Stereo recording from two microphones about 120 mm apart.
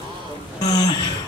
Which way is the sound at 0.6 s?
35° left (ahead or behind).